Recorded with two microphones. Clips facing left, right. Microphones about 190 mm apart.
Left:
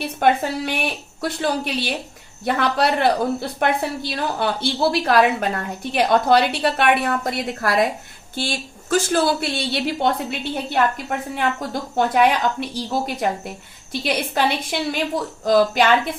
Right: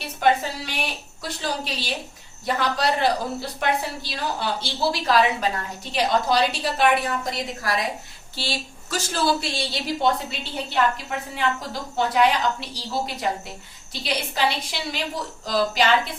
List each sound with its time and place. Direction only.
0.2 s a woman's voice: 55° left (ahead or behind)